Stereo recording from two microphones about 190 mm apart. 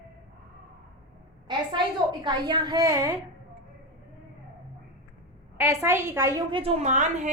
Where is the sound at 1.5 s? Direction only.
25° right (ahead or behind).